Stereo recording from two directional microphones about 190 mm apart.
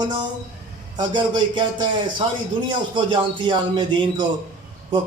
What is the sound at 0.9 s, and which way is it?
A man's voice, 25° right (ahead or behind).